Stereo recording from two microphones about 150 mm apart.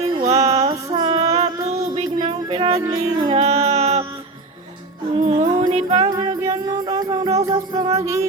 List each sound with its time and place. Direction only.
0.2 s music: 45° right (ahead or behind)
5.1 s music: 45° right (ahead or behind)
6.1 s music: 25° right (ahead or behind)